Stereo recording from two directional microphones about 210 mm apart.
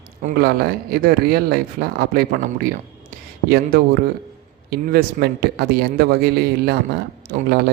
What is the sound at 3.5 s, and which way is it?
Speech, 45° right (ahead or behind).